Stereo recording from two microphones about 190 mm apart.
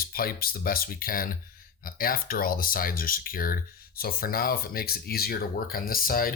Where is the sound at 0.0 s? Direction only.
50° left (ahead or behind).